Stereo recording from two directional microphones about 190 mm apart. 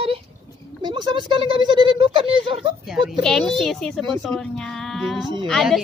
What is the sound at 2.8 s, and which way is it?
A woman's voice, centre (ahead or behind).